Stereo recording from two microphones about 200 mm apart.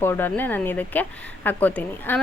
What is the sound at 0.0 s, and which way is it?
Speech, 10° left (ahead or behind).